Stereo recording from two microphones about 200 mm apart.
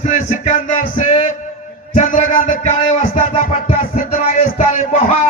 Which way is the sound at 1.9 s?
40° left (ahead or behind).